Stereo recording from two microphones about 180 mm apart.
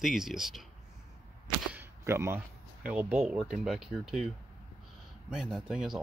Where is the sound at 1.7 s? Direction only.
15° right (ahead or behind).